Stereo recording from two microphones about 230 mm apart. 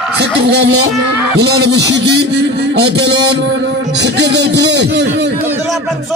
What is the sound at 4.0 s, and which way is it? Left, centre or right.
Speech, right.